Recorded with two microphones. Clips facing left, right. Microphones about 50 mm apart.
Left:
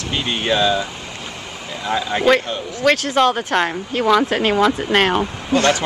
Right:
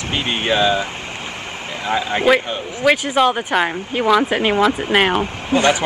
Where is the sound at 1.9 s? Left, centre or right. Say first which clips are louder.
Even; centre.